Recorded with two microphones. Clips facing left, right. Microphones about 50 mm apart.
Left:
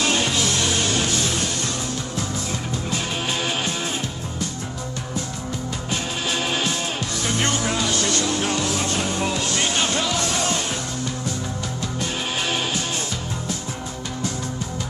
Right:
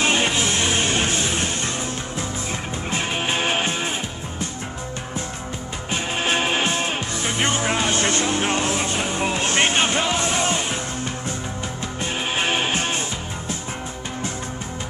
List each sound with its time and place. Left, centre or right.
0.0 s music: right
2.9 s music: right
5.9 s music: right
12.0 s music: right